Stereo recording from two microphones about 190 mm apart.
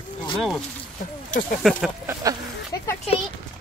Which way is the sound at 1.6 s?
Centre (ahead or behind).